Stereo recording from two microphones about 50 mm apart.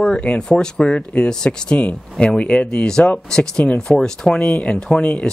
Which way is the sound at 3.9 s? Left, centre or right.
Centre.